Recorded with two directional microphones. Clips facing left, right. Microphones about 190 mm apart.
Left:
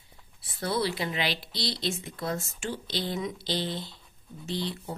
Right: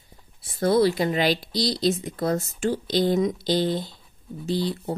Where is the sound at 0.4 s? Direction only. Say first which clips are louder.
Right 10 dB; 45° right (ahead or behind).